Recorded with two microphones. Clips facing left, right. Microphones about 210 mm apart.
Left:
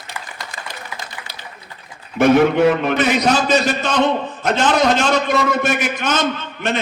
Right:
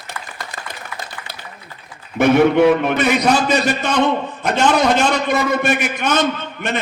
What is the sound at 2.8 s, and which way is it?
A man's voice, 55° right (ahead or behind).